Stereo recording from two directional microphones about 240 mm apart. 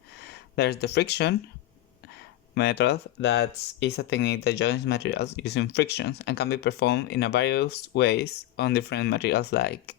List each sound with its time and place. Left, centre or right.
0.2 s speech: left
2.6 s speech: left